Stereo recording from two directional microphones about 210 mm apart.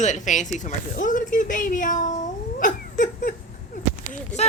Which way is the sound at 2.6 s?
40° left (ahead or behind).